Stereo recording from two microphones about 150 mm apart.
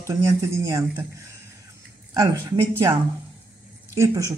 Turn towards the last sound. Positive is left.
turn(degrees=-20)  # may be behind; listen again after turning